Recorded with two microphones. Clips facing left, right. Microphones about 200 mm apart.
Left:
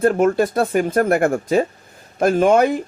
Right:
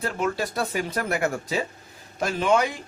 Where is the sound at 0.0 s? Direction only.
50° left (ahead or behind).